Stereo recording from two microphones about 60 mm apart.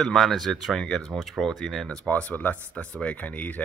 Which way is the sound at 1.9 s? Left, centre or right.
Left.